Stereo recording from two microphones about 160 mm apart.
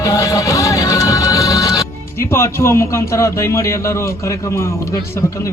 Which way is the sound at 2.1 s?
15° left (ahead or behind).